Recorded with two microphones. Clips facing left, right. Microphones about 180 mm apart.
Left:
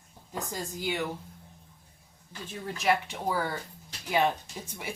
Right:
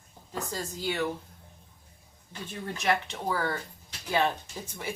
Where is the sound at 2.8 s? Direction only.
5° left (ahead or behind).